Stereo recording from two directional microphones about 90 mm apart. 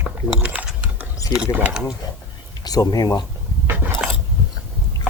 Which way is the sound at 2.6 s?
45° left (ahead or behind).